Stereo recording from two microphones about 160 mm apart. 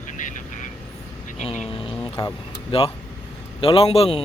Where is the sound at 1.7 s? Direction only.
35° left (ahead or behind).